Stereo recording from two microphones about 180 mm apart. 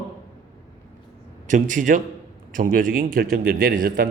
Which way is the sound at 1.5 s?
45° right (ahead or behind).